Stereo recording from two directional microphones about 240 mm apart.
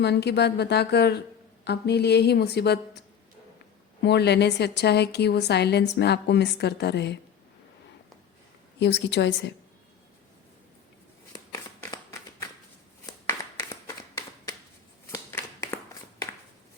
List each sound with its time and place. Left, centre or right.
0.0 s a woman's voice: left
4.0 s a woman's voice: left
8.8 s a woman's voice: left
11.3 s shuffling cards: centre
13.1 s clapping: centre
15.1 s a sound: centre